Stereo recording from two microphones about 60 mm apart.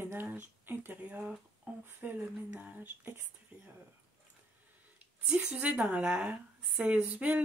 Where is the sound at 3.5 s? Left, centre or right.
Centre.